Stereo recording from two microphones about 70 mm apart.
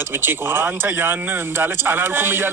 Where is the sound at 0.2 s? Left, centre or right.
Right.